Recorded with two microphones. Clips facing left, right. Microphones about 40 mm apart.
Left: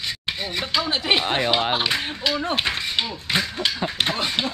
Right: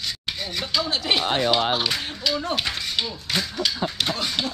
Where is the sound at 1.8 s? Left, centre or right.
Centre.